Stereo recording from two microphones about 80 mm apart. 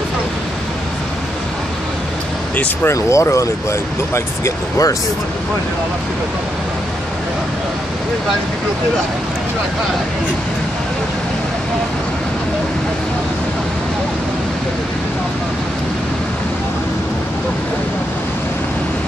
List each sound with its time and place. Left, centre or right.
2.5 s speech: left
2.9 s speech: left